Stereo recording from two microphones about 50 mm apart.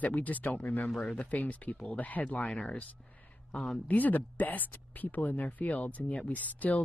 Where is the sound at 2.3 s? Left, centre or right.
Left.